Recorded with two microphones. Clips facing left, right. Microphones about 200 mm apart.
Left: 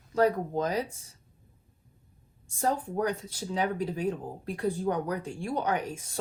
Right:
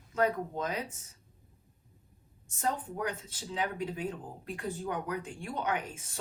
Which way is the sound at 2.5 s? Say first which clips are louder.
Left 5 dB; 35° left (ahead or behind).